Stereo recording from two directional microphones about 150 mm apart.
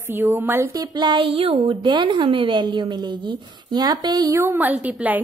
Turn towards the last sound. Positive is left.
turn(degrees=-10)  # may be behind; listen again after turning